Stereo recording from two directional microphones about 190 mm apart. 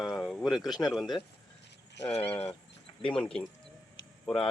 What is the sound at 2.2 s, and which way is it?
Speech, 10° left (ahead or behind).